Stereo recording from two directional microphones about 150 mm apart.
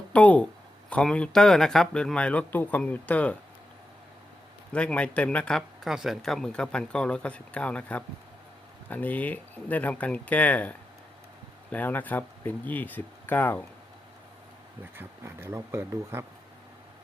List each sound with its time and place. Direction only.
0.1 s speech: 10° left (ahead or behind)
4.7 s speech: 10° left (ahead or behind)
14.9 s speech: 15° right (ahead or behind)